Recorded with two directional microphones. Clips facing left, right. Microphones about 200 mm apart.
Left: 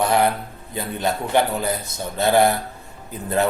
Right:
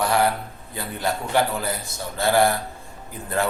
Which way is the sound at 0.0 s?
20° left (ahead or behind).